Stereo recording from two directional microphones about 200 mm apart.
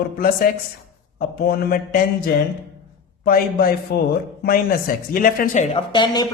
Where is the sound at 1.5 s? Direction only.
50° left (ahead or behind).